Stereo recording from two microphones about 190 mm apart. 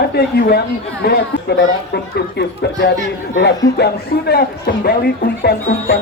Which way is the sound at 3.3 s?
60° left (ahead or behind).